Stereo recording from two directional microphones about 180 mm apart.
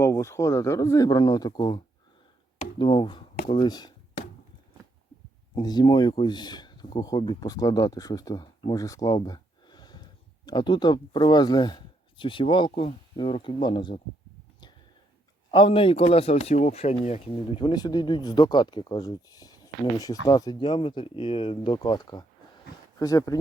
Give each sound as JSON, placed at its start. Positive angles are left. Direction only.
{"t": 0.0, "sound": "speech", "side_deg": 15}
{"t": 5.5, "sound": "speech", "side_deg": 25}
{"t": 15.5, "sound": "speech", "side_deg": 30}